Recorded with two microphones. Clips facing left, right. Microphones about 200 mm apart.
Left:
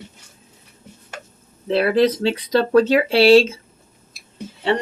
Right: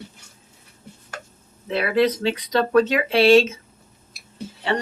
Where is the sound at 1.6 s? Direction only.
30° left (ahead or behind).